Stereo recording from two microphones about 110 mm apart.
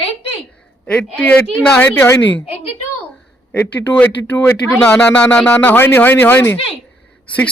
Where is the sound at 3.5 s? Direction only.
15° left (ahead or behind).